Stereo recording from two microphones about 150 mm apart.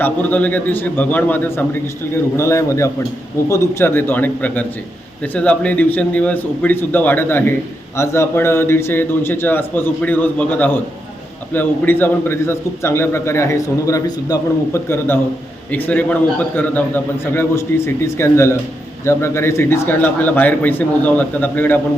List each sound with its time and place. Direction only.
0.0 s a man's voice: 10° left (ahead or behind)